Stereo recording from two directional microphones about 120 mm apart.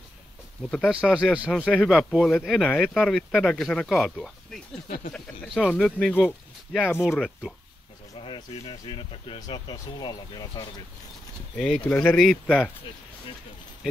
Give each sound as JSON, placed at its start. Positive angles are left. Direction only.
{"t": 0.7, "sound": "speech", "side_deg": 0}
{"t": 1.5, "sound": "speech", "side_deg": 5}
{"t": 8.2, "sound": "speech", "side_deg": 45}
{"t": 11.5, "sound": "speech", "side_deg": 5}